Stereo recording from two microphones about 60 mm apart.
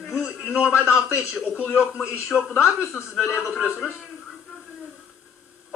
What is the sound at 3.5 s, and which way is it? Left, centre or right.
Speech, left.